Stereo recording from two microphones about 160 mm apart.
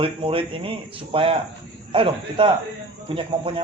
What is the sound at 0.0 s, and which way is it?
Speech, 35° right (ahead or behind).